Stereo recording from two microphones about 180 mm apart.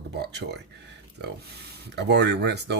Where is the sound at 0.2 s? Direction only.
65° right (ahead or behind).